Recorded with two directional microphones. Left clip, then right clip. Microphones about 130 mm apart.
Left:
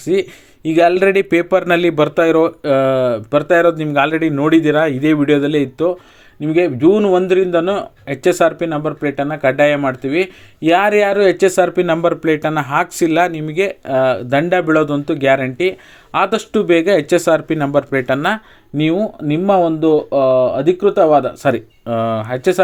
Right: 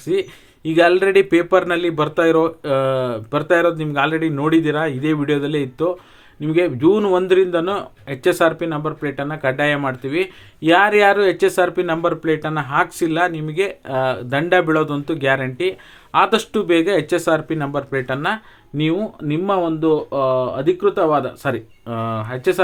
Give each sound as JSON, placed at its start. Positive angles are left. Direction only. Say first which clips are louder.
{"t": 0.0, "sound": "speech", "louder": "left 4 dB", "side_deg": 40}
{"t": 18.8, "sound": "speech", "louder": "left 4 dB", "side_deg": 35}